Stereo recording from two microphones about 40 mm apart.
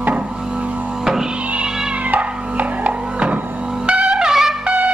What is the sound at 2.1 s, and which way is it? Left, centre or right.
Music, right.